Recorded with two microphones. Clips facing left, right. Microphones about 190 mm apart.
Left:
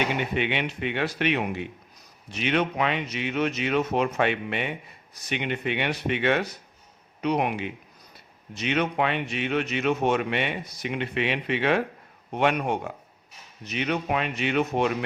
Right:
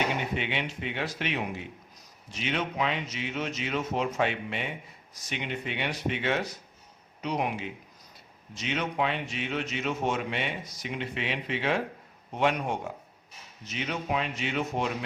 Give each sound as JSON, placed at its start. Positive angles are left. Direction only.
{"t": 0.2, "sound": "speech", "side_deg": 65}